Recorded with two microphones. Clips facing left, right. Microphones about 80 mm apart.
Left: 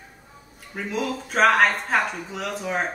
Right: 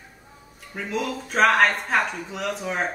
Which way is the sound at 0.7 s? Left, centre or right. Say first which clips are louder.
Even; centre.